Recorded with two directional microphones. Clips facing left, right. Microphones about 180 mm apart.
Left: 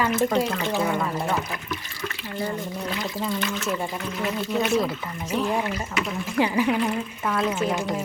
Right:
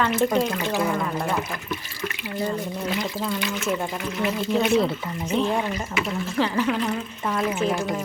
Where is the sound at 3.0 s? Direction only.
Centre (ahead or behind).